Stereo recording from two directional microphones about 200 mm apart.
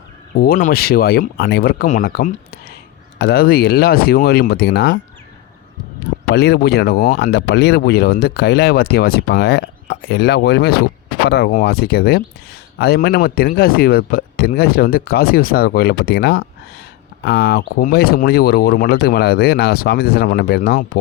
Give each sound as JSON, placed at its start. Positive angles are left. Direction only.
{"t": 0.3, "sound": "speech", "side_deg": 50}
{"t": 6.3, "sound": "speech", "side_deg": 55}
{"t": 17.7, "sound": "speech", "side_deg": 45}